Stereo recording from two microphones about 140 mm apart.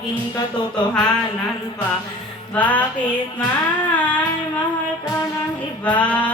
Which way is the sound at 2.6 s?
10° left (ahead or behind).